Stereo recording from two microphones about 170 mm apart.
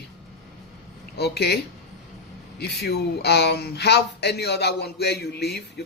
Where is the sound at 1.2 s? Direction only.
75° left (ahead or behind).